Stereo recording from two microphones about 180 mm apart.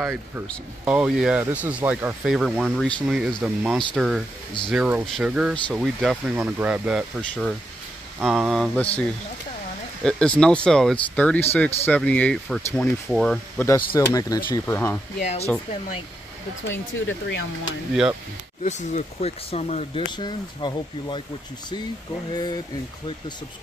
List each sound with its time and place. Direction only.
0.0 s speech: centre (ahead or behind)
2.6 s speech: centre (ahead or behind)
10.0 s speech: 5° left (ahead or behind)
13.7 s speech: 20° left (ahead or behind)
15.1 s speech: 40° left (ahead or behind)
16.6 s speech: 90° left
18.6 s speech: 40° left (ahead or behind)
20.1 s speech: 25° left (ahead or behind)